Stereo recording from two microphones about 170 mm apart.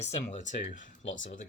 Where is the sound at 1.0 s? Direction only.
90° left.